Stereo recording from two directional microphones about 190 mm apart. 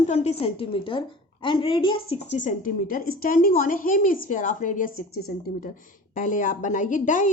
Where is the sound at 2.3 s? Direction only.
45° left (ahead or behind).